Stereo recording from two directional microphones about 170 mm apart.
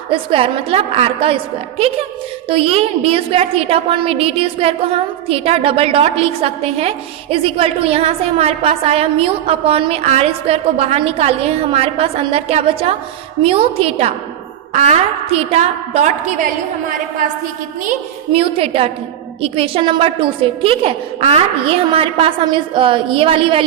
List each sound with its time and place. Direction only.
0.1 s a woman's voice: 30° right (ahead or behind)
2.5 s a woman's voice: 35° right (ahead or behind)
18.3 s a woman's voice: 35° right (ahead or behind)